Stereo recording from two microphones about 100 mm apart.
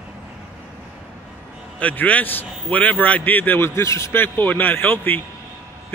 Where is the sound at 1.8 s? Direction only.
15° left (ahead or behind).